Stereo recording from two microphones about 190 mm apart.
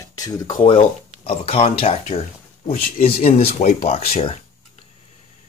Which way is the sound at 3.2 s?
35° left (ahead or behind).